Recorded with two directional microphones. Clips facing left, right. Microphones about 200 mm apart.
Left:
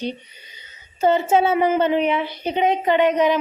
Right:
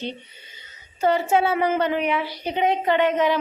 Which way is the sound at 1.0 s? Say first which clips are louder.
Left 3 dB; 25° left (ahead or behind).